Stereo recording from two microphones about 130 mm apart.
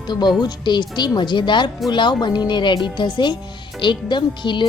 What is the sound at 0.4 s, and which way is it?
Speech, 35° left (ahead or behind).